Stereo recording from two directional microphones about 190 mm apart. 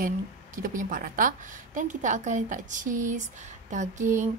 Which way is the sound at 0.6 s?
45° right (ahead or behind).